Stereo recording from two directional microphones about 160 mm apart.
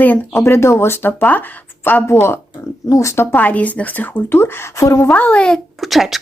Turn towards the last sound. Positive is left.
turn(degrees=0)  # may be behind; listen again after turning